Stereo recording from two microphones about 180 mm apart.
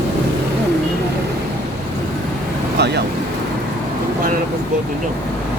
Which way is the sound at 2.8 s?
65° right (ahead or behind).